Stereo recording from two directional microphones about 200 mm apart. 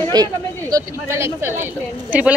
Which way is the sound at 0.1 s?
20° right (ahead or behind).